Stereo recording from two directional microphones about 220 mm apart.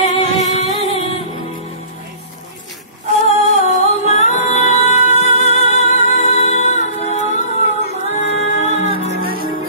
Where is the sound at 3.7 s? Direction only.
30° left (ahead or behind).